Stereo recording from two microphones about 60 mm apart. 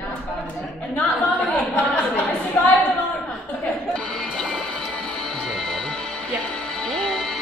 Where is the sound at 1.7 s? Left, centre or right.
Left.